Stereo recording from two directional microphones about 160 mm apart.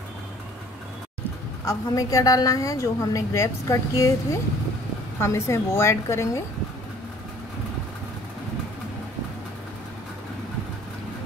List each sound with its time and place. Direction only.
1.6 s a woman's voice: 20° left (ahead or behind)